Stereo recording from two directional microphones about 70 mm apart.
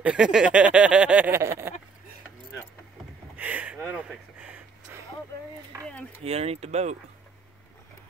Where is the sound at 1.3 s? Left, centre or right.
Right.